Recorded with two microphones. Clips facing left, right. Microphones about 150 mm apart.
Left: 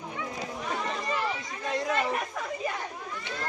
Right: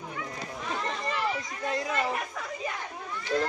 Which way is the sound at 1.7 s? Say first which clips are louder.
Left 3 dB; centre (ahead or behind).